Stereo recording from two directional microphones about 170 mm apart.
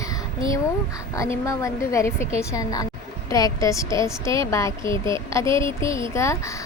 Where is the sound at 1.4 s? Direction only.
20° left (ahead or behind).